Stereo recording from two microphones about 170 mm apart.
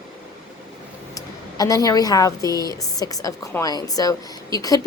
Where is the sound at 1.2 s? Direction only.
20° left (ahead or behind).